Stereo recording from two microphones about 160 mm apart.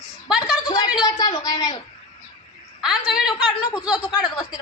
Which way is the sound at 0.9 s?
25° left (ahead or behind).